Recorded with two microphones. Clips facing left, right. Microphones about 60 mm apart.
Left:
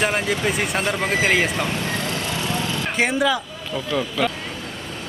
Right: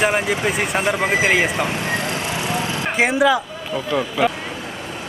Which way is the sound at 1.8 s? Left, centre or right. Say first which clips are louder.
Right 3 dB; right.